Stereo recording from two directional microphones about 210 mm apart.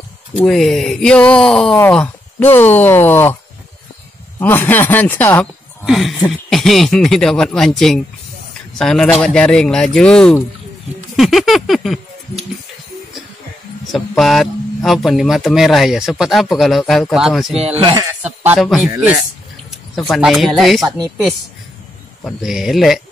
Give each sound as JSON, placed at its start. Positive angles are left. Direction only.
{"t": 0.5, "sound": "speech", "side_deg": 0}
{"t": 4.4, "sound": "speech", "side_deg": 10}
{"t": 11.1, "sound": "a sound", "side_deg": 0}
{"t": 13.9, "sound": "speech", "side_deg": 0}
{"t": 17.6, "sound": "speech", "side_deg": -25}
{"t": 18.2, "sound": "speech", "side_deg": -5}
{"t": 20.1, "sound": "speech", "side_deg": 0}
{"t": 22.2, "sound": "speech", "side_deg": 0}